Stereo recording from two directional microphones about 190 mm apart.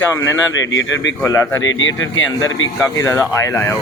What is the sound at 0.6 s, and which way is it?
Speech, 70° left (ahead or behind).